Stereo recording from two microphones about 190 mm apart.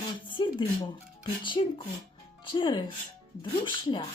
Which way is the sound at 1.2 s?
25° left (ahead or behind).